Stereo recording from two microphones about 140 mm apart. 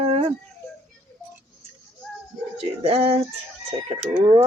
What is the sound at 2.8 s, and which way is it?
Speech, 45° right (ahead or behind).